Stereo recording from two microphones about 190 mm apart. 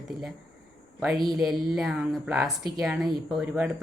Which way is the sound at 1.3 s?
5° right (ahead or behind).